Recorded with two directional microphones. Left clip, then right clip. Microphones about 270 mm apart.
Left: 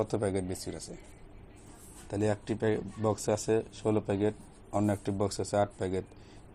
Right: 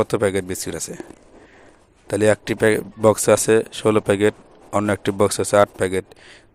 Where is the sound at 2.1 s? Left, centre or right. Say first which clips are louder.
Right 14 dB; right.